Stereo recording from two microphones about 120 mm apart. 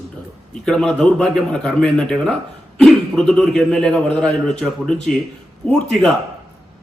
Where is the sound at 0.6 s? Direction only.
5° left (ahead or behind).